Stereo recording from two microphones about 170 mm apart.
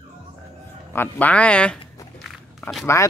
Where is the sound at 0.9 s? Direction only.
10° left (ahead or behind).